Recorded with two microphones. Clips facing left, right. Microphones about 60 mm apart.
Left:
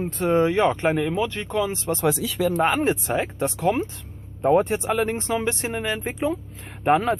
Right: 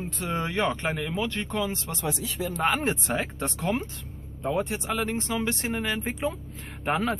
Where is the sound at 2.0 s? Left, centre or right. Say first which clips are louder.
Left 8 dB; left.